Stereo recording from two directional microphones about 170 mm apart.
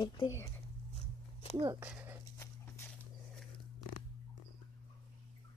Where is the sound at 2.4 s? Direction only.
15° left (ahead or behind).